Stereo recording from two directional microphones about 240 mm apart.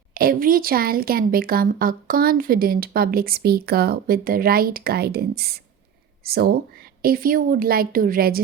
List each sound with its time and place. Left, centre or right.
0.1 s speech: right